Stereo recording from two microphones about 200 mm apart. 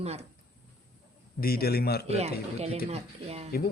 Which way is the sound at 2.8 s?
30° right (ahead or behind).